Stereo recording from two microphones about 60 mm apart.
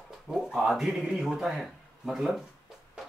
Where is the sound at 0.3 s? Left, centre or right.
Centre.